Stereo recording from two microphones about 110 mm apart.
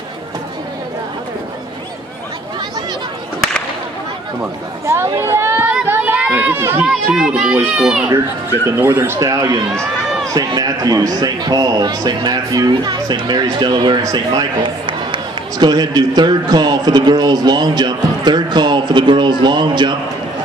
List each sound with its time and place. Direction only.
4.4 s speech: 25° right (ahead or behind)
5.7 s run: 15° right (ahead or behind)
6.8 s a child's voice: 10° right (ahead or behind)
8.7 s a man's voice: 25° right (ahead or behind); by 14.4 s 45° right (ahead or behind)
15.6 s a man's voice: 35° right (ahead or behind)